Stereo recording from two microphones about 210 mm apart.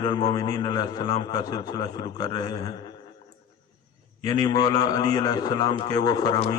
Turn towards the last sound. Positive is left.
turn(degrees=20)  # may be behind; listen again after turning